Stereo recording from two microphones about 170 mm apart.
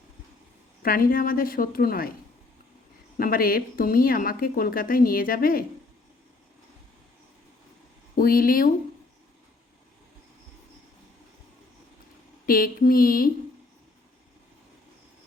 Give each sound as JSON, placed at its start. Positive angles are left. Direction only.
{"t": 0.8, "sound": "a woman's voice", "side_deg": 60}
{"t": 3.2, "sound": "a woman's voice", "side_deg": 60}
{"t": 8.1, "sound": "speech", "side_deg": 60}
{"t": 12.5, "sound": "a woman's voice", "side_deg": 60}